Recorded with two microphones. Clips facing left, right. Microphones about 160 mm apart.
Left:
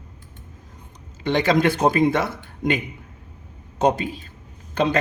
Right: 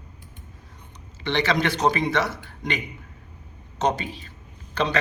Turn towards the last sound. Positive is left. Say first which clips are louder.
# left 4 dB
turn(degrees=50)  # may be behind; listen again after turning